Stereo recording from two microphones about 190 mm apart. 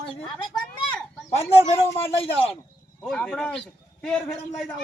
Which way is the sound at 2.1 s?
30° left (ahead or behind).